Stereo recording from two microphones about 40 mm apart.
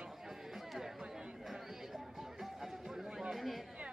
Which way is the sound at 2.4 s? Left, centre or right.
Centre.